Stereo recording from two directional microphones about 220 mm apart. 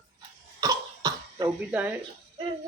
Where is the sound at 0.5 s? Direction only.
15° right (ahead or behind).